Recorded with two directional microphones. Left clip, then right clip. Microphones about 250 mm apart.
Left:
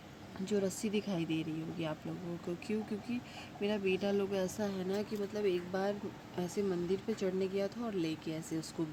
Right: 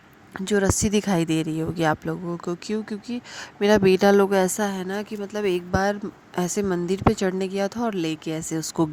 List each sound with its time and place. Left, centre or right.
0.4 s speech: right